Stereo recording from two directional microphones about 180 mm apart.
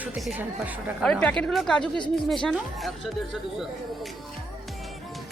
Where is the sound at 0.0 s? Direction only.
5° right (ahead or behind).